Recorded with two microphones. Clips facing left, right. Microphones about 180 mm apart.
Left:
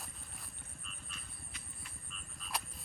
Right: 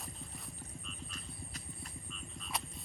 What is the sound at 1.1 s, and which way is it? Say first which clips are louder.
Frog: right 6 dB; 40° right (ahead or behind).